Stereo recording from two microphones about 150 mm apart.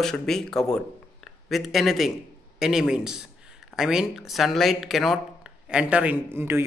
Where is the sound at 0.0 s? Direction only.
5° left (ahead or behind).